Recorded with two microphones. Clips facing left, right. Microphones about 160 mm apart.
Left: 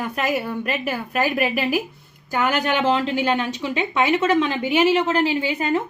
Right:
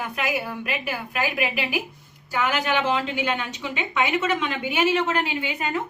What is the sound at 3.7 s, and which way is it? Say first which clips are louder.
A woman's voice: left 4 dB; 35° left (ahead or behind).